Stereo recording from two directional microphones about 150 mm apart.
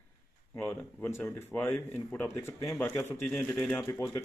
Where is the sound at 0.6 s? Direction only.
5° left (ahead or behind).